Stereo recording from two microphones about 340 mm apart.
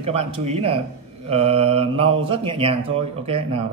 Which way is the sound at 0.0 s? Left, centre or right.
Centre.